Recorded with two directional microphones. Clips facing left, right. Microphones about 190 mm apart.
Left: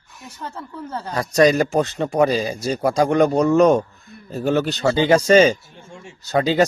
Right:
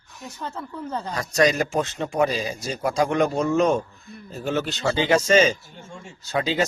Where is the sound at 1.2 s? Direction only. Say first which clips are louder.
Left 6 dB; 35° left (ahead or behind).